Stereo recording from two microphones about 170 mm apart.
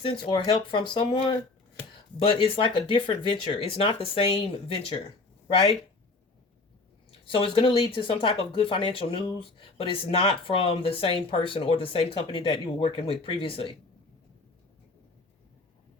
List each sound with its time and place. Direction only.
0.0 s speech: 30° left (ahead or behind)
7.1 s speech: 30° left (ahead or behind)